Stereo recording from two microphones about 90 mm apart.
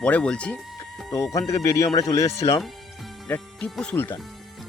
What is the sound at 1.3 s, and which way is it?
Speech, 35° left (ahead or behind).